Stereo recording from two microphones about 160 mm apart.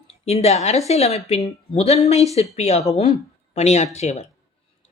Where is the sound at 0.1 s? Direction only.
40° left (ahead or behind).